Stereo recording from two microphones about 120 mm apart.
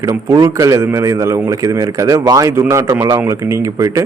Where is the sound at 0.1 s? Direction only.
30° right (ahead or behind).